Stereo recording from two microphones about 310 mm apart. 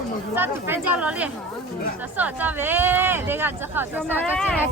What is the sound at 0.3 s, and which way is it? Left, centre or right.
A woman's voice, centre.